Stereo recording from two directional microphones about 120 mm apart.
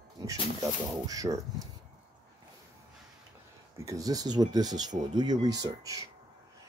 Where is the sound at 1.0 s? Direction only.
30° right (ahead or behind).